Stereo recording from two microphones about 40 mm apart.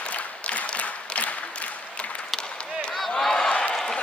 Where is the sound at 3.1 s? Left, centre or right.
Centre.